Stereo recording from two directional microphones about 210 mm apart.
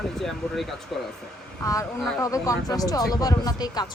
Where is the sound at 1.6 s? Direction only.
15° left (ahead or behind).